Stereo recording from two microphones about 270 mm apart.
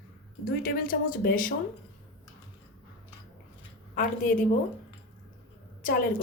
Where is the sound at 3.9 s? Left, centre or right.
Left.